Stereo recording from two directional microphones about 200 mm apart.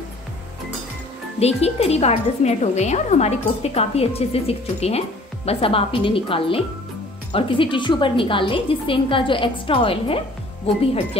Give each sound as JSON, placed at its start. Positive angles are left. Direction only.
{"t": 1.4, "sound": "a woman's voice", "side_deg": 30}